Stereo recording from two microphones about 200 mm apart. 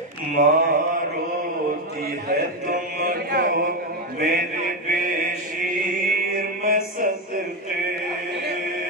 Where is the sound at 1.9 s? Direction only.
50° right (ahead or behind).